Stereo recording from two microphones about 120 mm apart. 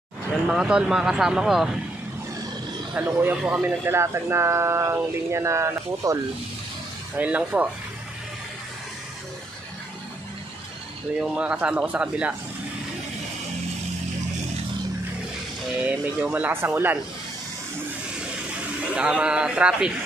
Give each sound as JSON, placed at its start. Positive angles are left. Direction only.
{"t": 0.5, "sound": "speech", "side_deg": -5}
{"t": 2.9, "sound": "speech", "side_deg": -15}
{"t": 7.2, "sound": "speech", "side_deg": -15}
{"t": 11.1, "sound": "speech", "side_deg": -10}
{"t": 15.8, "sound": "speech", "side_deg": -15}
{"t": 18.9, "sound": "speech", "side_deg": -10}